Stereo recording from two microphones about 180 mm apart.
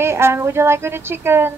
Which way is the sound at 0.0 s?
15° right (ahead or behind).